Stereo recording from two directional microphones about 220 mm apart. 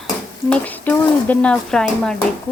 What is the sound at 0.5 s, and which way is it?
Speech, 5° left (ahead or behind).